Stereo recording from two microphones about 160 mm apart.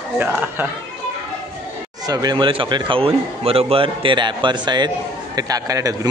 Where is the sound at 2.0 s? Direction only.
25° right (ahead or behind).